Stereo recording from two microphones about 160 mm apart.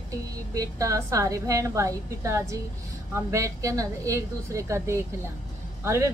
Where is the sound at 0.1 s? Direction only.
20° right (ahead or behind).